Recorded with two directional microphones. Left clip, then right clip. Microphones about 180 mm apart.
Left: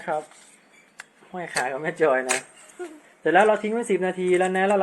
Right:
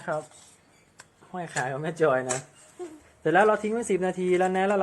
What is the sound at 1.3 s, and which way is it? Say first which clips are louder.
Speech: left 3 dB; 5° right (ahead or behind).